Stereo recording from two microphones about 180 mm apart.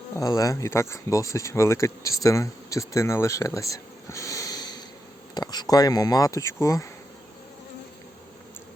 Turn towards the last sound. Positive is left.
turn(degrees=15)  # may be behind; listen again after turning